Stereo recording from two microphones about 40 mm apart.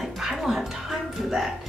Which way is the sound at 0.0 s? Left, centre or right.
Centre.